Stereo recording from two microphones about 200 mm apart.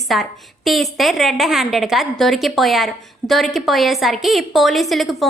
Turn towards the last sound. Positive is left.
turn(degrees=0)  # may be behind; listen again after turning